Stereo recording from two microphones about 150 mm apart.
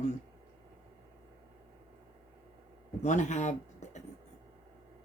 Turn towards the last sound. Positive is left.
turn(degrees=50)  # may be behind; listen again after turning